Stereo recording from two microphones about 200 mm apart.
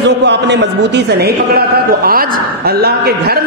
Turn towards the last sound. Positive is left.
turn(degrees=-50)  # may be behind; listen again after turning